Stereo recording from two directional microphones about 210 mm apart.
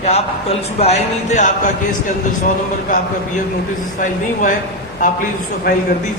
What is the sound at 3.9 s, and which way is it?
Speech, 40° left (ahead or behind).